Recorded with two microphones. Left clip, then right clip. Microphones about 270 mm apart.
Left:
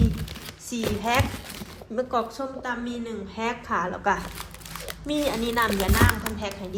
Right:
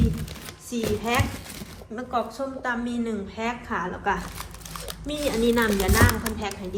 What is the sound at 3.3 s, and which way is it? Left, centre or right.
A woman's voice, left.